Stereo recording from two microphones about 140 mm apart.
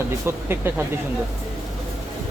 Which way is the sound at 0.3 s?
15° right (ahead or behind).